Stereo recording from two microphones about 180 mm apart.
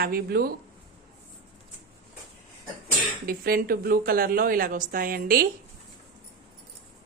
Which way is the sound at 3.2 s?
55° right (ahead or behind).